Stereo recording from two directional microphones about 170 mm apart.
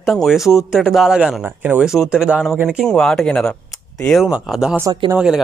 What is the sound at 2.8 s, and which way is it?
Speech, 5° left (ahead or behind).